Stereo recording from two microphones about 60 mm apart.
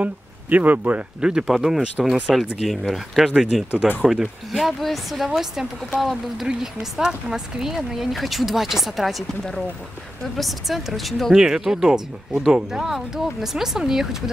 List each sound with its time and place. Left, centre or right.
0.0 s speech: right
1.2 s speech: centre
1.8 s speech: centre
2.6 s speech: centre
10.3 s speech: centre
11.3 s speech: centre